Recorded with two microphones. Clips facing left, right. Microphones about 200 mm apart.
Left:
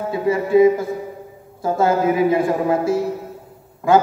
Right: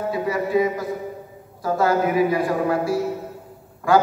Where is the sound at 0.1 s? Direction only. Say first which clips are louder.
Left 6 dB; 25° left (ahead or behind).